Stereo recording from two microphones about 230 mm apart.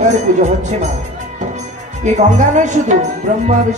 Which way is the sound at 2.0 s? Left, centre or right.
Right.